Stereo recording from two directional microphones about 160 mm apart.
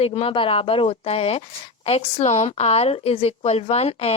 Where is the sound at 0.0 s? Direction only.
40° left (ahead or behind).